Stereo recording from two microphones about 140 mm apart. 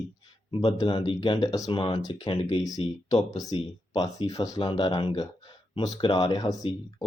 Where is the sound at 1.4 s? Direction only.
25° left (ahead or behind).